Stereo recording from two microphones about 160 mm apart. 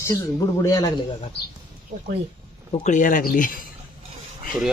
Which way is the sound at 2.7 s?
45° left (ahead or behind).